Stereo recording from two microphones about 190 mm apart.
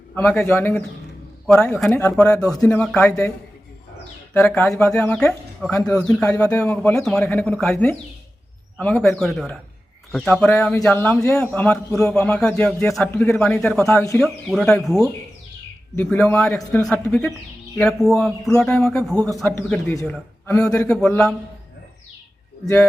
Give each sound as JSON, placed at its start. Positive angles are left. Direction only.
{"t": 0.2, "sound": "a man's voice", "side_deg": 10}
{"t": 1.9, "sound": "a man's voice", "side_deg": 10}
{"t": 4.4, "sound": "a man's voice", "side_deg": 10}
{"t": 13.9, "sound": "a man's voice", "side_deg": 15}
{"t": 14.2, "sound": "a man's voice", "side_deg": 5}
{"t": 19.1, "sound": "a man's voice", "side_deg": -15}
{"t": 19.4, "sound": "a man's voice", "side_deg": 5}
{"t": 20.8, "sound": "speech", "side_deg": 5}
{"t": 22.6, "sound": "a man's voice", "side_deg": 15}